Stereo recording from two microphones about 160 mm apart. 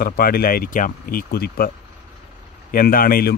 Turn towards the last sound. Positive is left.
turn(degrees=65)  # may be behind; listen again after turning